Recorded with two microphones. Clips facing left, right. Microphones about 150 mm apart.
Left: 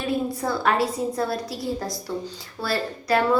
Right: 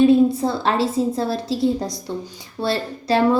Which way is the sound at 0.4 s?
30° right (ahead or behind).